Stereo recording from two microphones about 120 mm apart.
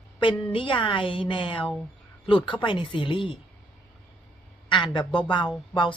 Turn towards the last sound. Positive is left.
turn(degrees=40)  # may be behind; listen again after turning